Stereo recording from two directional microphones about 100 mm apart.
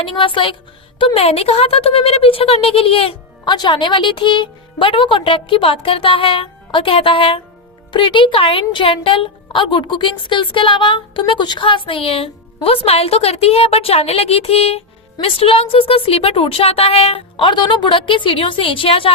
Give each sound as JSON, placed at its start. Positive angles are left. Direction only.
{"t": 0.0, "sound": "a woman's voice", "side_deg": 60}
{"t": 3.4, "sound": "a woman's voice", "side_deg": 45}
{"t": 15.2, "sound": "a woman's voice", "side_deg": 75}